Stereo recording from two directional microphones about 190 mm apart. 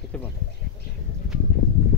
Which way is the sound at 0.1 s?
5° left (ahead or behind).